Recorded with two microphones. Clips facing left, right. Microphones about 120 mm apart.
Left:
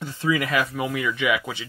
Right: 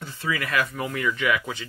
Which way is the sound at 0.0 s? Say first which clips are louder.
Left 5 dB; 15° left (ahead or behind).